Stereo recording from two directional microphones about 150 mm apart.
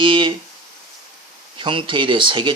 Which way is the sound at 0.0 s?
35° right (ahead or behind).